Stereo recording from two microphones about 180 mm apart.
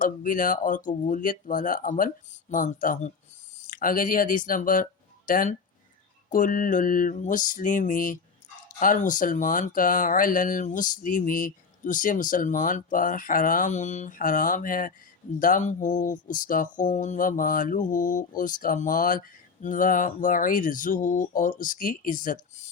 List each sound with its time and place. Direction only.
0.0 s speech: 50° left (ahead or behind)